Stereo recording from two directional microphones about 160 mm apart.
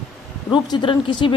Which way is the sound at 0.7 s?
30° left (ahead or behind).